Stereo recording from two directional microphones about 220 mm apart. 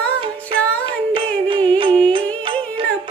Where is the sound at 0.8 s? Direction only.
20° right (ahead or behind).